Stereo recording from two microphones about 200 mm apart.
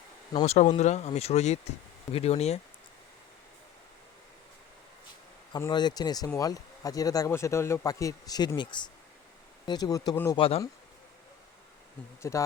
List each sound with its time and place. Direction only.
0.4 s speech: 30° left (ahead or behind)
5.5 s speech: 20° left (ahead or behind)
12.2 s speech: 15° left (ahead or behind)